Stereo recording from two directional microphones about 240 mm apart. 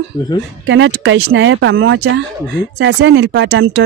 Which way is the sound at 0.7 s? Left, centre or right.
Right.